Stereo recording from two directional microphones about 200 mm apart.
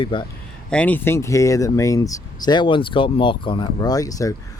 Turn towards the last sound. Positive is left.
turn(degrees=15)  # may be behind; listen again after turning